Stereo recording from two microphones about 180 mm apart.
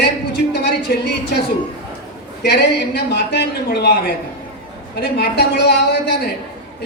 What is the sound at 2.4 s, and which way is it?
A man's voice, 65° left (ahead or behind).